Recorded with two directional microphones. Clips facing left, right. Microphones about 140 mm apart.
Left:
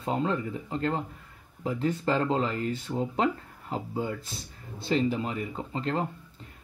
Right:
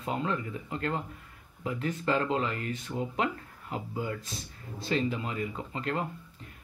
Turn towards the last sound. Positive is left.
turn(degrees=30)  # may be behind; listen again after turning